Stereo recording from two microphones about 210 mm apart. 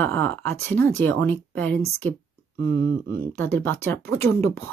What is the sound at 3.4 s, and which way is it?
Speech, 10° left (ahead or behind).